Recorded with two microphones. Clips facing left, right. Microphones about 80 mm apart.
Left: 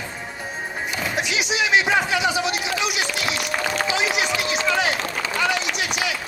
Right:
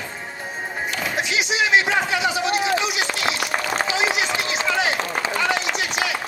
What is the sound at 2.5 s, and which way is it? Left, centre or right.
Run, right.